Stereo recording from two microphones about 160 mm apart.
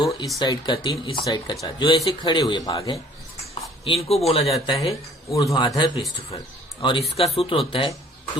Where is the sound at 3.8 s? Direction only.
35° left (ahead or behind).